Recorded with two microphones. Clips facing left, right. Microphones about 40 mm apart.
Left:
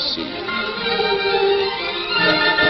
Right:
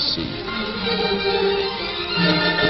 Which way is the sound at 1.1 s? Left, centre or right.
Centre.